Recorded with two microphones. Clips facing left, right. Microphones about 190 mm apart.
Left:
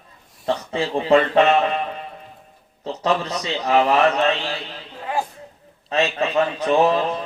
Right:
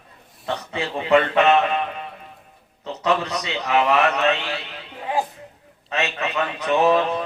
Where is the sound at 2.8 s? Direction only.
35° left (ahead or behind).